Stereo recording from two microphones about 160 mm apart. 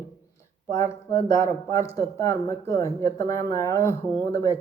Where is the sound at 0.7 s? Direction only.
20° left (ahead or behind).